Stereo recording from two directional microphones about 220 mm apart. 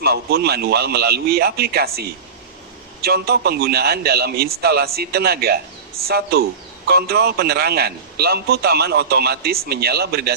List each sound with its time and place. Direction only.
0.0 s a man's voice: 45° right (ahead or behind)